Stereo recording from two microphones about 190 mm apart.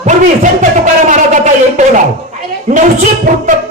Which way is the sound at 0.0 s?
40° right (ahead or behind).